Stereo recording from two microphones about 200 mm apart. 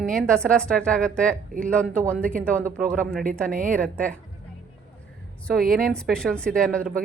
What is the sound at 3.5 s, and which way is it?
Speech, 40° right (ahead or behind).